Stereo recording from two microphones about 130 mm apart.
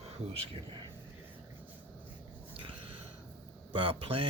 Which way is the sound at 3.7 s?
45° right (ahead or behind).